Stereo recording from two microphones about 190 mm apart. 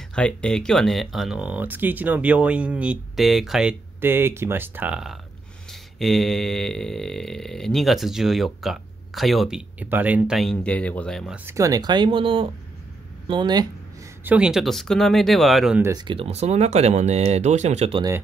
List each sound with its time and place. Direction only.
0.1 s burping: 5° left (ahead or behind); by 12.4 s 25° right (ahead or behind)
13.3 s speech: 25° right (ahead or behind)
14.2 s burping: 5° right (ahead or behind)
15.8 s speech: 20° right (ahead or behind)